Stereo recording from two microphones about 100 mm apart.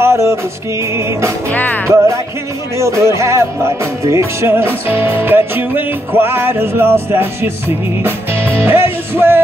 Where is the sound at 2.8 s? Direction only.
30° right (ahead or behind).